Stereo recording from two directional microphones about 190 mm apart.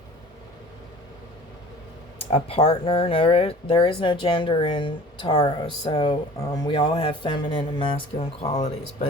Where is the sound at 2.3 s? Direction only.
30° left (ahead or behind).